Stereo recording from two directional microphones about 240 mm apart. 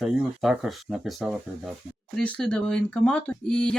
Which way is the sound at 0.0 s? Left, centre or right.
Centre.